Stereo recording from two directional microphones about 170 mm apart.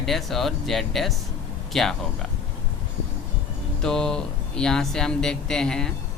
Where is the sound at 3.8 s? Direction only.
5° left (ahead or behind).